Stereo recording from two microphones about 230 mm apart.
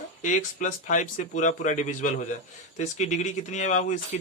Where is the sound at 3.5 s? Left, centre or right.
Left.